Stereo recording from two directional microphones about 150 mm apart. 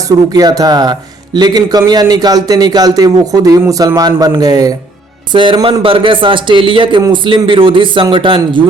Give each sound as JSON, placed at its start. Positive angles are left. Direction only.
{"t": 0.1, "sound": "a man's voice", "side_deg": -25}